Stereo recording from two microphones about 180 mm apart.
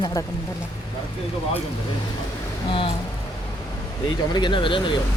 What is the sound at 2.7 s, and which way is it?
Speech, 30° left (ahead or behind).